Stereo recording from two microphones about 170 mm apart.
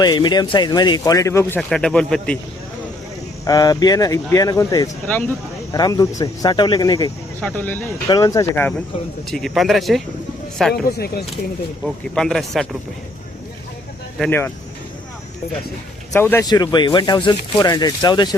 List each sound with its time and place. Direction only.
0.0 s speech: 25° left (ahead or behind); by 2.4 s 5° left (ahead or behind)
3.4 s speech: 20° left (ahead or behind)
7.4 s speech: 10° left (ahead or behind)
9.3 s speech: centre (ahead or behind)
10.8 s speech: 65° left (ahead or behind)
12.1 s speech: centre (ahead or behind)
14.3 s speech: 10° left (ahead or behind)
16.1 s speech: 15° left (ahead or behind)
16.5 s speech: 25° left (ahead or behind)